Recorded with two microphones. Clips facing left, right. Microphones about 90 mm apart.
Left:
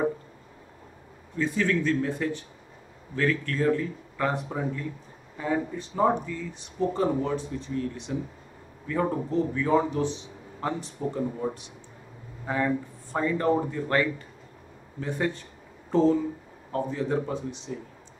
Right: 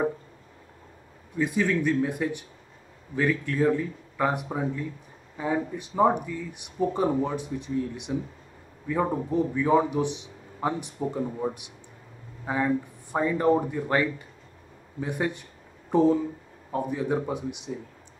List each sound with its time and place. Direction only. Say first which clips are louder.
1.3 s a man's voice: right 1 dB; 15° right (ahead or behind)